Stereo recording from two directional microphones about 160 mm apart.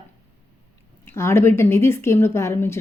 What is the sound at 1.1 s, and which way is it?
Speech, 15° left (ahead or behind).